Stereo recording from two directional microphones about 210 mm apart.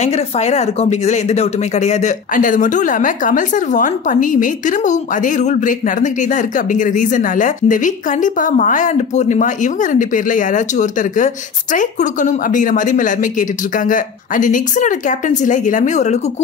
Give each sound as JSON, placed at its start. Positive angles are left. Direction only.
{"t": 0.0, "sound": "speech", "side_deg": 30}